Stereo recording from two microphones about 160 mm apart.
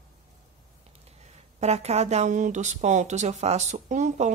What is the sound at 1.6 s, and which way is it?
Speech, 45° right (ahead or behind).